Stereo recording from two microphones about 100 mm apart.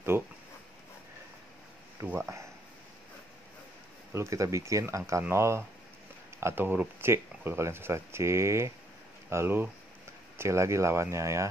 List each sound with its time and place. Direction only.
2.0 s speech: 25° right (ahead or behind)
4.1 s speech: 30° right (ahead or behind)